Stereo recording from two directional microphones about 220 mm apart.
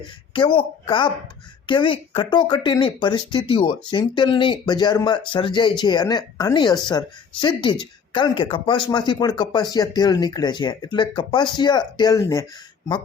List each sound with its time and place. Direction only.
0.3 s speech: 20° left (ahead or behind)